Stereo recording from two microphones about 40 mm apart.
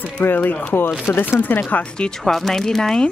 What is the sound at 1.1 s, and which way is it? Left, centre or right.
Speech, left.